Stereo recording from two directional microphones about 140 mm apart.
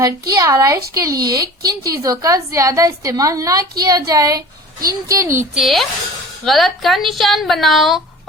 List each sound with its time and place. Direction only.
0.0 s a woman's voice: 25° right (ahead or behind)
5.5 s speech: centre (ahead or behind)